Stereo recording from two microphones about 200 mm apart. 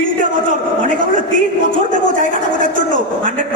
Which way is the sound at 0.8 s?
40° right (ahead or behind).